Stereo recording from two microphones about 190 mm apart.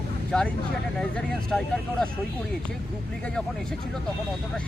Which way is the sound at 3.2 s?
5° left (ahead or behind).